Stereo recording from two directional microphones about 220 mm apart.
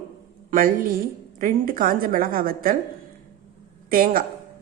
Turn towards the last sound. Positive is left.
turn(degrees=-40)  # may be behind; listen again after turning